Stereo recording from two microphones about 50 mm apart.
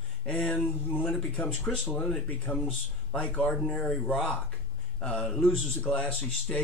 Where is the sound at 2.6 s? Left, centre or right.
Left.